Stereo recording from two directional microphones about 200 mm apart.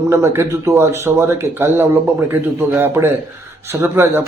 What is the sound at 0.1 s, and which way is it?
A man's voice, 15° right (ahead or behind).